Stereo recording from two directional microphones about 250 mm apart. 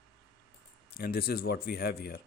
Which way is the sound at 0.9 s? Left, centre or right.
Left.